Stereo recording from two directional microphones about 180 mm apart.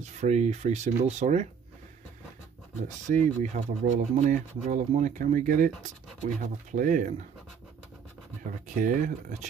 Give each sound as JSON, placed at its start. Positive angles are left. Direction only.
{"t": 0.0, "sound": "speech", "side_deg": -40}
{"t": 3.2, "sound": "speech", "side_deg": -40}
{"t": 8.6, "sound": "speech", "side_deg": -45}